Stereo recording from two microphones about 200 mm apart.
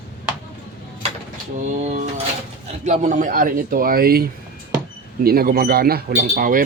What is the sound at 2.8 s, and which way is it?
Speech, 35° right (ahead or behind).